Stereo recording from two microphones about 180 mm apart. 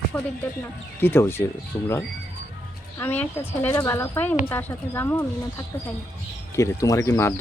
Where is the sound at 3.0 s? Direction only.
10° left (ahead or behind).